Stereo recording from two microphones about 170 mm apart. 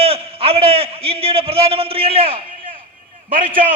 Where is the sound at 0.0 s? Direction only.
35° right (ahead or behind).